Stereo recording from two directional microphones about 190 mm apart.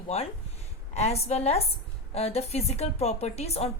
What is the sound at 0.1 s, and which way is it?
A woman's voice, 35° left (ahead or behind).